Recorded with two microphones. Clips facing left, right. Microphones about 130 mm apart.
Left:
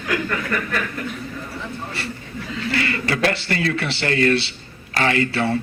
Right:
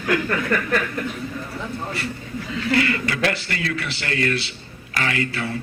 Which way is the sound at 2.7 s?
30° left (ahead or behind).